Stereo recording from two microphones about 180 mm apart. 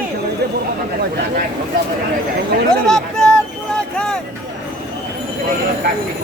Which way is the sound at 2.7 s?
5° left (ahead or behind).